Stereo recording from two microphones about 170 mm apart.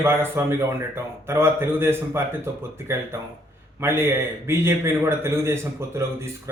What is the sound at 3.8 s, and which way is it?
A man's voice, 15° right (ahead or behind).